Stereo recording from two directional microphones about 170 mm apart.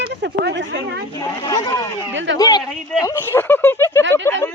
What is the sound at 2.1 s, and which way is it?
Speech, 90° right.